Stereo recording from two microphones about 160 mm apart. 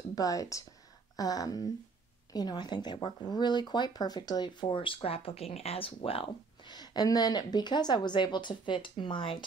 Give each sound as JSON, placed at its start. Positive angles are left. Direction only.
{"t": 0.1, "sound": "speech", "side_deg": 20}